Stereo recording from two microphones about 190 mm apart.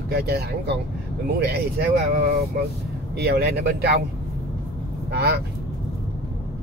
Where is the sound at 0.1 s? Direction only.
60° right (ahead or behind).